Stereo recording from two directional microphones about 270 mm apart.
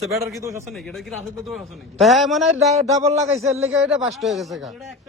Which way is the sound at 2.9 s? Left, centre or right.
Centre.